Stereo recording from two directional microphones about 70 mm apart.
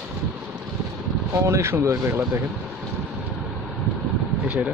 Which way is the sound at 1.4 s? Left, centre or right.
Right.